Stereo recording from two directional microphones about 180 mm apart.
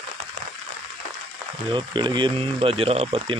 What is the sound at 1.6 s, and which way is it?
Speech, 25° right (ahead or behind).